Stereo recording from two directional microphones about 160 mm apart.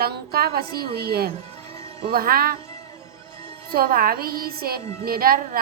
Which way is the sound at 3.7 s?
65° right (ahead or behind).